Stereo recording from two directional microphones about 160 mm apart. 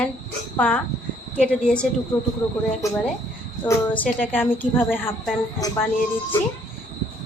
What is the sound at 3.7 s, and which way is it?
A woman's voice, 10° left (ahead or behind).